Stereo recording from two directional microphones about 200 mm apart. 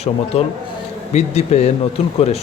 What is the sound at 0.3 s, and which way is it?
Speech, 30° left (ahead or behind).